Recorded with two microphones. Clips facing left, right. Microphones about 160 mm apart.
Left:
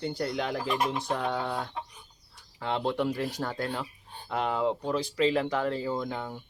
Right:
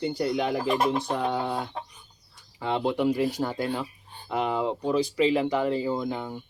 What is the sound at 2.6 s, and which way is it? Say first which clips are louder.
Speech: right 4 dB; 5° right (ahead or behind).